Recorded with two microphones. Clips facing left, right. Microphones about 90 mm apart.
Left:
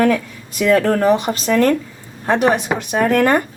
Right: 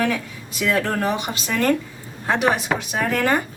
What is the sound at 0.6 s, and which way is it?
Speech, 45° left (ahead or behind).